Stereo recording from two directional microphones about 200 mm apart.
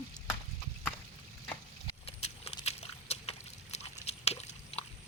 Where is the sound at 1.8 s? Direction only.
30° left (ahead or behind).